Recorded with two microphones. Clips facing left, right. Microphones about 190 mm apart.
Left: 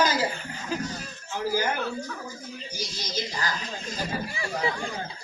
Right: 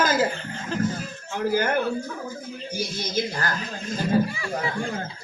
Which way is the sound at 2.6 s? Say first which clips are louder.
Right 8 dB; 55° right (ahead or behind).